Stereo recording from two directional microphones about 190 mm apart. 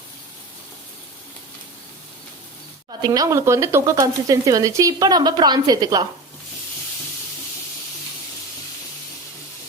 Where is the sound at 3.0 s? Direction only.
20° right (ahead or behind).